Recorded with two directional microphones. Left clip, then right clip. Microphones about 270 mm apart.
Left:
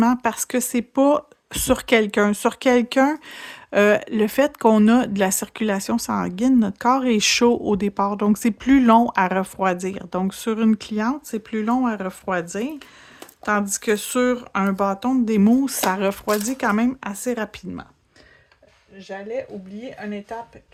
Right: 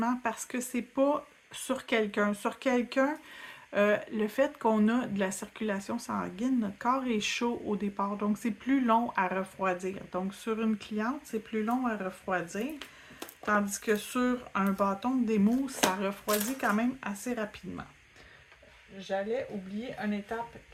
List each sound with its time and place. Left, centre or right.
0.0 s speech: left
19.5 s speech: centre